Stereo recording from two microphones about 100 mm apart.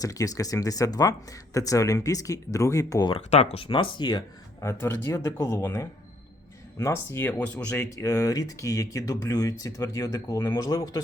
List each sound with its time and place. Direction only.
0.0 s speech: 35° left (ahead or behind)
3.4 s speech: 80° left
3.7 s speech: 55° left (ahead or behind)
4.6 s speech: 25° left (ahead or behind)
7.9 s speech: 30° left (ahead or behind)